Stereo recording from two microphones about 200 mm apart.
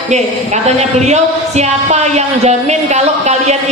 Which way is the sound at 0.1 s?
35° right (ahead or behind).